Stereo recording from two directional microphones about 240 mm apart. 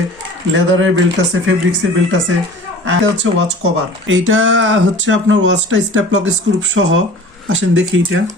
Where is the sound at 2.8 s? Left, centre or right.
Right.